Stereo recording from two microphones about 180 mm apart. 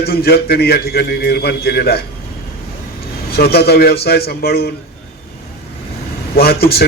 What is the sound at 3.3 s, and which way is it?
A man's voice, 60° left (ahead or behind).